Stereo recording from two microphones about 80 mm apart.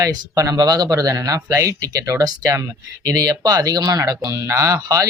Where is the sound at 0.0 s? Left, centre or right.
Right.